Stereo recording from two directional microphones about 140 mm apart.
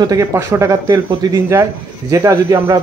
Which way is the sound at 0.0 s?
25° right (ahead or behind).